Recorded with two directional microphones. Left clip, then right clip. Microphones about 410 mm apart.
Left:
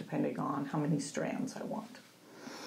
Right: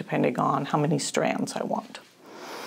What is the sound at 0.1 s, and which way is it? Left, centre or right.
Speech, right.